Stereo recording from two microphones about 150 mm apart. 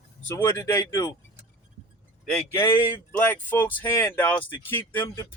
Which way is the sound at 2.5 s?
15° left (ahead or behind).